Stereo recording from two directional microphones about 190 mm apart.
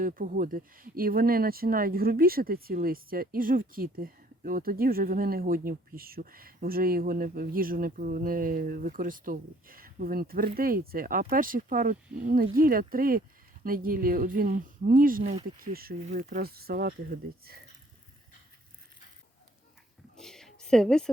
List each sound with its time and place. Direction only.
0.0 s speech: 45° right (ahead or behind)
15.2 s speech: 30° right (ahead or behind)
15.5 s speech: 50° right (ahead or behind)
20.1 s a sound: centre (ahead or behind)